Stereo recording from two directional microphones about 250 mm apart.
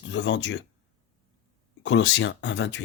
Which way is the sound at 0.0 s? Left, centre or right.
Left.